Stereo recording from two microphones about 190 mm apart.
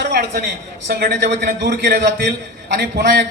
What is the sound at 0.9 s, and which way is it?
A man's voice, 60° right (ahead or behind).